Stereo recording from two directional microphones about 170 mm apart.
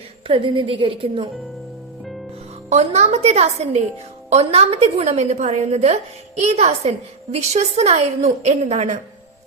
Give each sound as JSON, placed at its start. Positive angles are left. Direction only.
{"t": 0.3, "sound": "a woman's voice", "side_deg": -30}
{"t": 2.6, "sound": "a woman's voice", "side_deg": -40}